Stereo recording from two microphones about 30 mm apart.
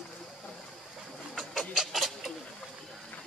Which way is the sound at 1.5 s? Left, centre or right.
Centre.